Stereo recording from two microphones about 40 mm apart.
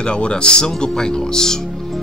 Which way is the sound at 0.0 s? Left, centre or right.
Left.